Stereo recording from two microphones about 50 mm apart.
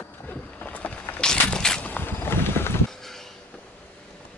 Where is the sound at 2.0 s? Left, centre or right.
Left.